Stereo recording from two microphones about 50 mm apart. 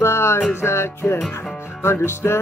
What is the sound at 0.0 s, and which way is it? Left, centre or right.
Music, left.